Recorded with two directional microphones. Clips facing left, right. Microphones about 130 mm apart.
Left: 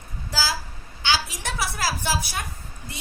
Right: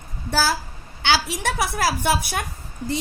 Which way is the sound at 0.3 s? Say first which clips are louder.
Right 6 dB; 60° right (ahead or behind).